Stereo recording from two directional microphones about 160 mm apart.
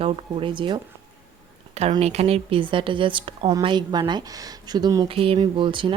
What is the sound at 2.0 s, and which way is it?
A woman's voice, 40° right (ahead or behind).